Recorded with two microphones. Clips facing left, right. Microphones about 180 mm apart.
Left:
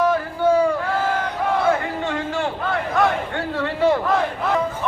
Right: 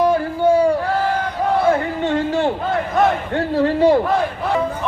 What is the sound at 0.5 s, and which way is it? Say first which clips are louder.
Crowd: right 3 dB; 35° right (ahead or behind).